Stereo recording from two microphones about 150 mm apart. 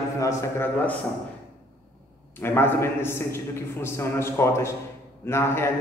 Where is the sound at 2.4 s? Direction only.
15° left (ahead or behind).